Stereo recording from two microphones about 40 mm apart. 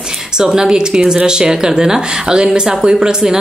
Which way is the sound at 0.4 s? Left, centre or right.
Centre.